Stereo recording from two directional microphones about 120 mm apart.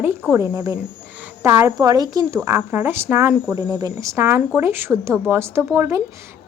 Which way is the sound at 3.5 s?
30° right (ahead or behind).